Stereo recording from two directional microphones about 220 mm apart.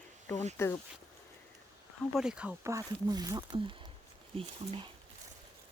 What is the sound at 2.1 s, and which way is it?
Speech, centre (ahead or behind).